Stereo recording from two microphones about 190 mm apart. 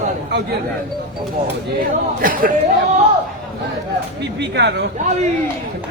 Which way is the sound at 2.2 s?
45° right (ahead or behind).